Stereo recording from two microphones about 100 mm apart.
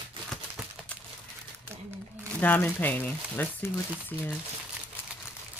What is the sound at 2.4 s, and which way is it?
Speech, 20° left (ahead or behind).